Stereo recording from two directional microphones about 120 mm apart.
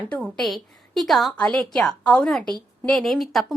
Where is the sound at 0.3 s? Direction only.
Centre (ahead or behind).